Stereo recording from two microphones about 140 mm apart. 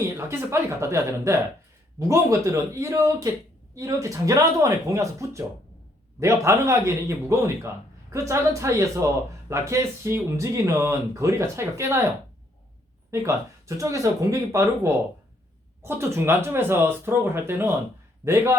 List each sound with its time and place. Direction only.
0.3 s speech: 20° right (ahead or behind)
13.1 s speech: 20° right (ahead or behind)